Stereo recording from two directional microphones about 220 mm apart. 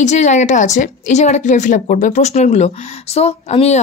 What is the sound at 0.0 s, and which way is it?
A woman's voice, 35° left (ahead or behind).